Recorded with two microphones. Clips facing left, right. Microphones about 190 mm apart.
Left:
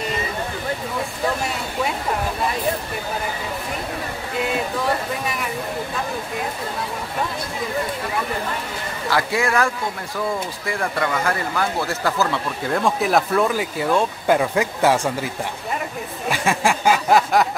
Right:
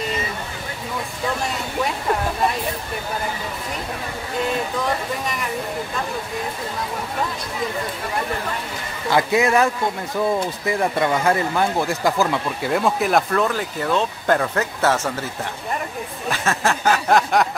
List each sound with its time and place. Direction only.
9.1 s speech: 20° right (ahead or behind)
10.7 s speech: 20° right (ahead or behind)
12.8 s speech: centre (ahead or behind)
16.3 s speech: 10° left (ahead or behind)